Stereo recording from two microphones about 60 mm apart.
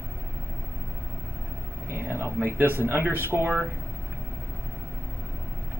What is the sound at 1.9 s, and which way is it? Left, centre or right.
Speech, right.